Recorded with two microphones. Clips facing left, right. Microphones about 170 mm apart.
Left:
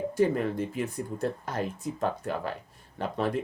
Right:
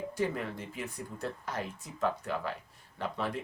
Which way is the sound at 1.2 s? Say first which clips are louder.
Left 6 dB; 45° left (ahead or behind).